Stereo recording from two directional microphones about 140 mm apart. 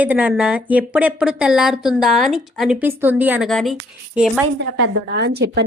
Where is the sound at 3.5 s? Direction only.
5° left (ahead or behind).